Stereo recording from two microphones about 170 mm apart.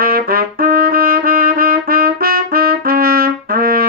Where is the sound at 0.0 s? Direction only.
60° right (ahead or behind).